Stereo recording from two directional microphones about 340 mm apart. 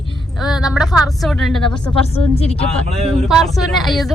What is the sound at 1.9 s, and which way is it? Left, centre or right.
Speech, centre.